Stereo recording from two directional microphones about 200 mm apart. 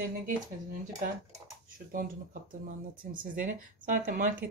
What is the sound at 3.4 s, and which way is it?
Speech, 40° right (ahead or behind).